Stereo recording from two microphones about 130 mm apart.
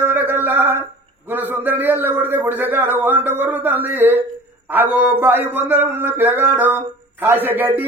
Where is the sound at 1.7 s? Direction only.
15° right (ahead or behind).